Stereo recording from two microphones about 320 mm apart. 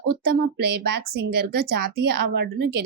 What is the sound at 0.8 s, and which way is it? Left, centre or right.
A woman's voice, right.